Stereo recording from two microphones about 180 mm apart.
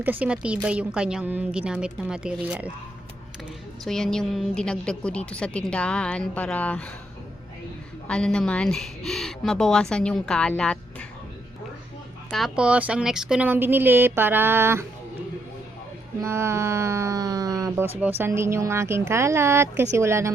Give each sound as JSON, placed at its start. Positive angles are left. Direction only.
{"t": 0.0, "sound": "speech", "side_deg": -10}
{"t": 3.8, "sound": "a woman's voice", "side_deg": 5}
{"t": 8.0, "sound": "a woman's voice", "side_deg": 5}
{"t": 12.3, "sound": "speech", "side_deg": 0}
{"t": 16.2, "sound": "speech", "side_deg": -15}